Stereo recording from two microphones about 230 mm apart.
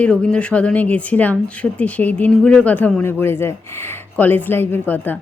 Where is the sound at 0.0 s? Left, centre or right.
Centre.